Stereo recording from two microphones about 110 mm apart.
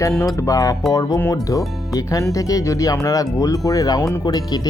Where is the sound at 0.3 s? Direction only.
30° left (ahead or behind).